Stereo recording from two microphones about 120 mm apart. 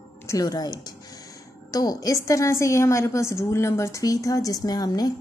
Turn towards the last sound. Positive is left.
turn(degrees=30)  # may be behind; listen again after turning